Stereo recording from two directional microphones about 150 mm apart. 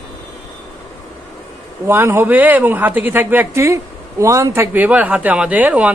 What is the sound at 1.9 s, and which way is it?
A woman's voice, 15° right (ahead or behind).